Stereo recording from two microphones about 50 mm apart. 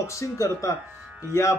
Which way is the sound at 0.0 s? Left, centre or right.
Left.